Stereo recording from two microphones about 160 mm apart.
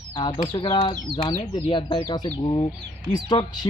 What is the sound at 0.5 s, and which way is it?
Speech, 35° left (ahead or behind).